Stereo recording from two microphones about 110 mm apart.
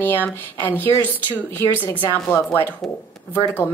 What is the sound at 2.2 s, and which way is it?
Speech, 15° left (ahead or behind).